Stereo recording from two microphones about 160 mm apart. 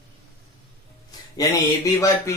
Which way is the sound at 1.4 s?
20° left (ahead or behind).